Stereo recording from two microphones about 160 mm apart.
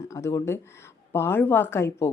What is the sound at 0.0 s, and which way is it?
Speech, 15° left (ahead or behind).